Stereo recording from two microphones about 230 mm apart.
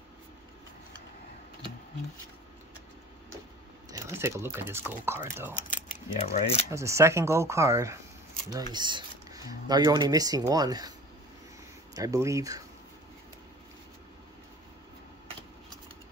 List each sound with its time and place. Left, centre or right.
3.9 s speech: centre
5.7 s speech: left
6.7 s speech: centre
11.9 s speech: centre